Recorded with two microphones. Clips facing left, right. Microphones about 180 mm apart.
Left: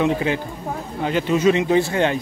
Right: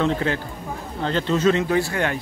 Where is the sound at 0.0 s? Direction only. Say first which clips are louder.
Left 2 dB; 15° left (ahead or behind).